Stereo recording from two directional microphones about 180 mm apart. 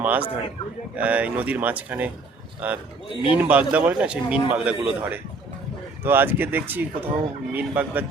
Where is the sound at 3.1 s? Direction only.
30° left (ahead or behind).